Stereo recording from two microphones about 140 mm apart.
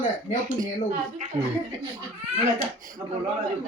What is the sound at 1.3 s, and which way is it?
Speech, 25° right (ahead or behind).